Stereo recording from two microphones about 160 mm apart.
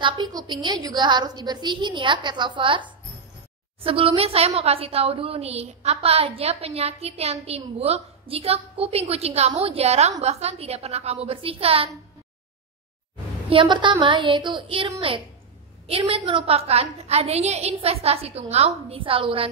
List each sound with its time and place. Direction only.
0.0 s a woman's voice: 25° right (ahead or behind)
13.5 s a woman's voice: 30° right (ahead or behind)